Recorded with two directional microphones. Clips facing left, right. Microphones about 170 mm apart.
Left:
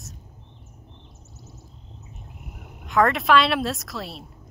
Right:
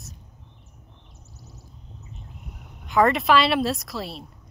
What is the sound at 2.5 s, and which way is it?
Speech, centre (ahead or behind).